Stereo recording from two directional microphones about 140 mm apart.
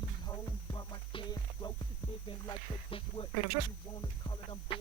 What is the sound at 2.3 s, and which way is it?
Speech, 40° left (ahead or behind).